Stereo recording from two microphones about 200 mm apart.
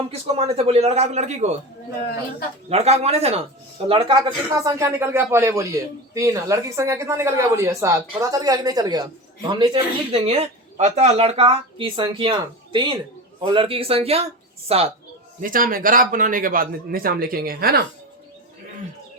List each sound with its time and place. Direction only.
0.1 s a man's voice: 30° right (ahead or behind)
2.6 s a man's voice: 35° right (ahead or behind)
15.4 s a man's voice: 45° right (ahead or behind)